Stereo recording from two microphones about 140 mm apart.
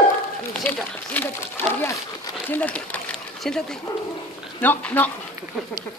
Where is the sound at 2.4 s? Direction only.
10° left (ahead or behind).